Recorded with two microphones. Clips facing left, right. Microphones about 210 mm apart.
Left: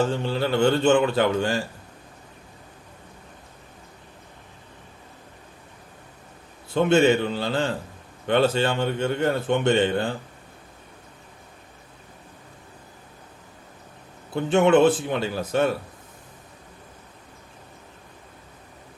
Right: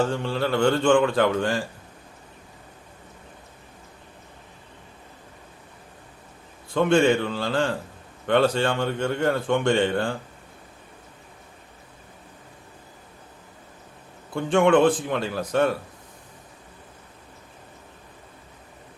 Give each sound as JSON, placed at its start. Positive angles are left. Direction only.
{"t": 0.1, "sound": "speech", "side_deg": 25}
{"t": 6.7, "sound": "speech", "side_deg": 25}
{"t": 14.5, "sound": "speech", "side_deg": 25}